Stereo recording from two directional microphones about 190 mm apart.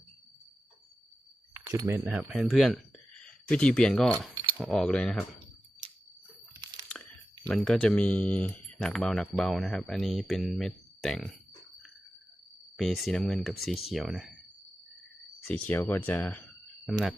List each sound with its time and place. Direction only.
1.5 s keys jangling: 15° right (ahead or behind)
2.0 s speech: 5° right (ahead or behind)
7.4 s speech: 5° left (ahead or behind)
12.7 s speech: centre (ahead or behind)
15.4 s speech: 10° left (ahead or behind)